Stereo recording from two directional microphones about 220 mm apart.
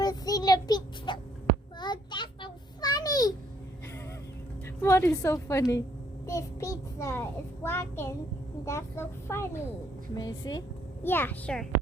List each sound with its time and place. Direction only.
0.0 s child singing: 15° left (ahead or behind)
1.8 s a sound: 20° left (ahead or behind)
4.8 s a woman's voice: 10° left (ahead or behind)
6.2 s child singing: 15° left (ahead or behind)
8.6 s a woman's voice: 10° left (ahead or behind)